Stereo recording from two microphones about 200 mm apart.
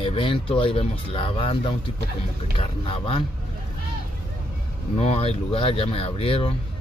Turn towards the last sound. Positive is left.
turn(degrees=30)  # may be behind; listen again after turning